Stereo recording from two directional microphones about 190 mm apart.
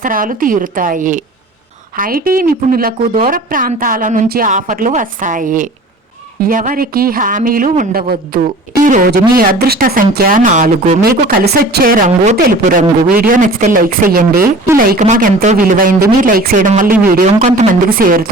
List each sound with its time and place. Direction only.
0.0 s speech: 45° right (ahead or behind)